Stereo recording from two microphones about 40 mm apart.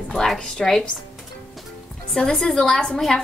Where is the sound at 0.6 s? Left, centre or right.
Centre.